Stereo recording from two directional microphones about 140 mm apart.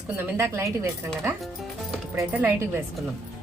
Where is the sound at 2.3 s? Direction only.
15° right (ahead or behind).